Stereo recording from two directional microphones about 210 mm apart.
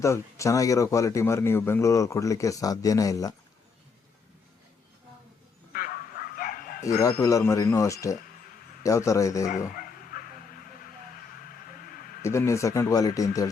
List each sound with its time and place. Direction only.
0.0 s a man's voice: 15° left (ahead or behind)
5.7 s bow-wow: 45° left (ahead or behind)
7.2 s a man's voice: 15° left (ahead or behind)
9.5 s bow-wow: 40° left (ahead or behind)
11.8 s a sound: 40° left (ahead or behind)
12.2 s a man's voice: 15° left (ahead or behind)